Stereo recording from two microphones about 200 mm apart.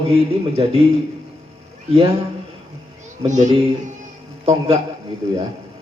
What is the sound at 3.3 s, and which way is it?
A man's voice, 35° right (ahead or behind).